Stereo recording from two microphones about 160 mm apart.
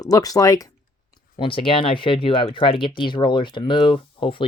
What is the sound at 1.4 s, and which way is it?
Speech, 35° left (ahead or behind).